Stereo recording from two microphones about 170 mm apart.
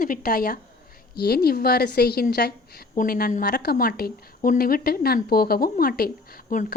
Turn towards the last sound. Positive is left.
turn(degrees=50)  # may be behind; listen again after turning